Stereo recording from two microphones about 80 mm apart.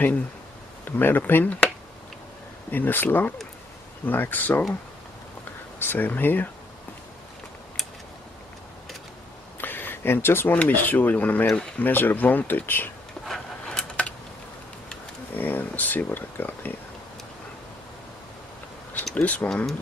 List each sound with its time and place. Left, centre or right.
0.8 s speech: left
2.7 s speech: left
5.8 s speech: left
9.6 s speech: left
13.2 s a sound: centre
15.3 s speech: left
19.2 s speech: centre